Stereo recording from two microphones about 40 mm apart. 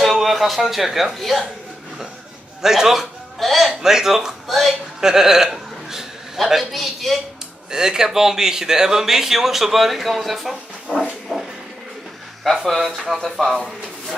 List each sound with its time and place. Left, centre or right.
0.0 s speech: centre
2.6 s speech: centre
3.3 s a man's voice: centre
7.7 s speech: centre
11.3 s speech: centre
12.5 s speech: centre